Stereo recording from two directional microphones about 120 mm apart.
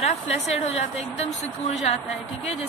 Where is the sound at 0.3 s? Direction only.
65° left (ahead or behind).